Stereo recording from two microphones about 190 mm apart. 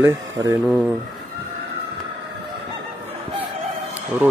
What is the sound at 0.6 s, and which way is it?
Speech, 5° right (ahead or behind).